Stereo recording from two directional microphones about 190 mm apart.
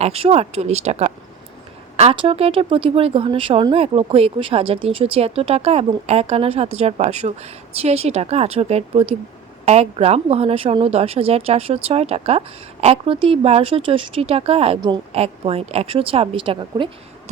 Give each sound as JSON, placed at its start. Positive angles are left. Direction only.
{"t": 0.0, "sound": "speech", "side_deg": -30}